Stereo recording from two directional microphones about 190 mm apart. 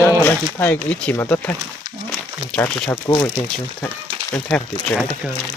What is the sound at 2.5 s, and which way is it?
Speech, 10° left (ahead or behind).